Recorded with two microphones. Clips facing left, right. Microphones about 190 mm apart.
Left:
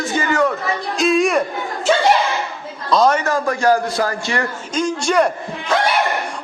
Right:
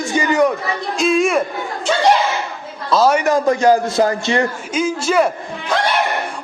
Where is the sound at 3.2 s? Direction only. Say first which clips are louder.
Right 4 dB; 20° right (ahead or behind).